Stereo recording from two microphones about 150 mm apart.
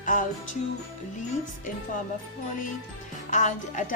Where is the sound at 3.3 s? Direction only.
60° left (ahead or behind).